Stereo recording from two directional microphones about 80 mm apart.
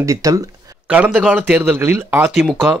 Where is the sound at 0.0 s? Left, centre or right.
Right.